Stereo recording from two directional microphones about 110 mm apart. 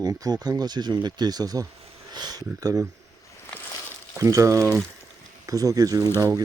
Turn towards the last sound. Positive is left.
turn(degrees=-30)  # may be behind; listen again after turning